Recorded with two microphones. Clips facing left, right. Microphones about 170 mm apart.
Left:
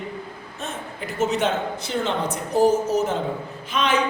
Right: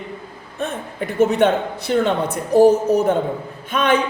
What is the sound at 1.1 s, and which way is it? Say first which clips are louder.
A man's voice: right 7 dB; 60° right (ahead or behind).